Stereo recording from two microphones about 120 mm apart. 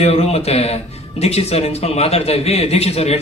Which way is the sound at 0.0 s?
60° left (ahead or behind).